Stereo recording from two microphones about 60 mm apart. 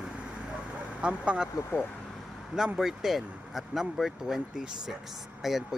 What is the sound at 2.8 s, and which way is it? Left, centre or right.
Speech, centre.